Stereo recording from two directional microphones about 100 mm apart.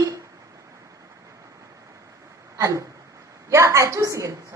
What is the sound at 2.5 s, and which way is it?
A woman's voice, 35° right (ahead or behind).